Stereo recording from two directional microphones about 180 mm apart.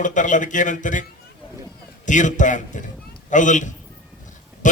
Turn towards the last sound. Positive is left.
turn(degrees=45)  # may be behind; listen again after turning